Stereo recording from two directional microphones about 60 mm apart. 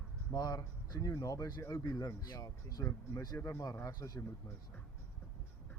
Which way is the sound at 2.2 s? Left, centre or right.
Left.